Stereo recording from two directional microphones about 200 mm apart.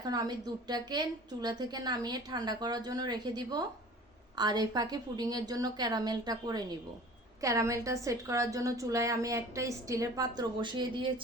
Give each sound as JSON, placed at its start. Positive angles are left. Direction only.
{"t": 0.0, "sound": "a woman's voice", "side_deg": -20}